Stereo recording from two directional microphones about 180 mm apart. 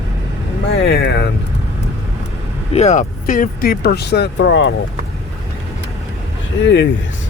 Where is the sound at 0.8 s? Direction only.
70° left (ahead or behind).